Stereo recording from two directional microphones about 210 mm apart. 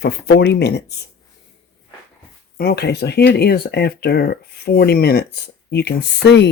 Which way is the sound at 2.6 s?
50° left (ahead or behind).